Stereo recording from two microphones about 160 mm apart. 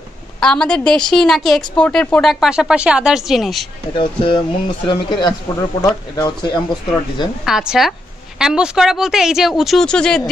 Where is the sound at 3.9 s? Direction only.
30° left (ahead or behind).